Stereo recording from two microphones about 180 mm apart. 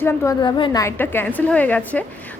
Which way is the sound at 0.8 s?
10° left (ahead or behind).